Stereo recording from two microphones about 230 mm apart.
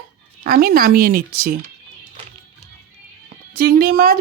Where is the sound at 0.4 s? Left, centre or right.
Right.